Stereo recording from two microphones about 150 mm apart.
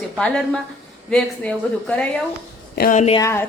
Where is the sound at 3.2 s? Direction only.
15° left (ahead or behind).